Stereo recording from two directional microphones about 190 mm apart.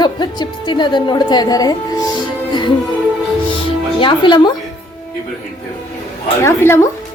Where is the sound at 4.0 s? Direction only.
25° left (ahead or behind).